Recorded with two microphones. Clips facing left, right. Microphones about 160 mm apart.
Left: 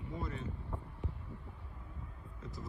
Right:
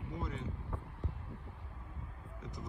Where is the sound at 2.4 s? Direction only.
20° right (ahead or behind).